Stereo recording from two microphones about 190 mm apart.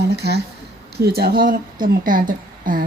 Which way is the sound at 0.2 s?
60° right (ahead or behind).